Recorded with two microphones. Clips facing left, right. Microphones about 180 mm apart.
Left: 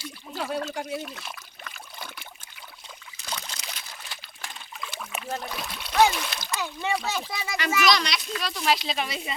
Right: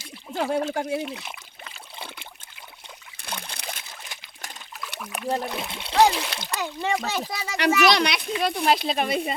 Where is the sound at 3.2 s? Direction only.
60° right (ahead or behind).